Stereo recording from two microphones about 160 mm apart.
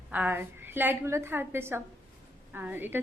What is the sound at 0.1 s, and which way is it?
A woman's voice, 10° right (ahead or behind).